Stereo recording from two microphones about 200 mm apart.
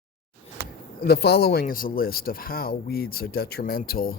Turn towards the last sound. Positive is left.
turn(degrees=45)  # may be behind; listen again after turning